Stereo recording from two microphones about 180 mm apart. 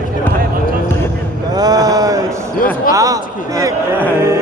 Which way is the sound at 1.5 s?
20° right (ahead or behind).